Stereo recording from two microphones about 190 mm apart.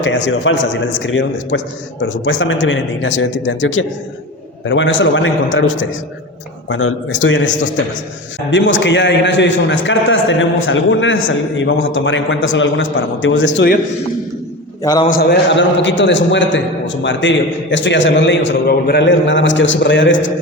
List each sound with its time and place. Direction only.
0.3 s a man's voice: 70° left (ahead or behind)
15.0 s a man's voice: 50° left (ahead or behind); by 20.3 s 75° left (ahead or behind)